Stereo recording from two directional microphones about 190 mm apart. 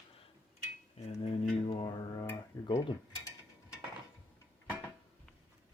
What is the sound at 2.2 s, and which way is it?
Speech, 15° left (ahead or behind).